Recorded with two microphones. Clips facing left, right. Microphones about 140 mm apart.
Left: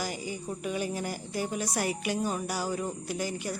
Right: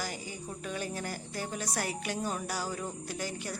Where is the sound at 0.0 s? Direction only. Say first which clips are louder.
Left 4 dB; 15° left (ahead or behind).